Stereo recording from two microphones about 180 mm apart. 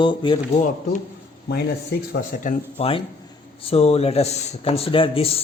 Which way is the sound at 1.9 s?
65° left (ahead or behind).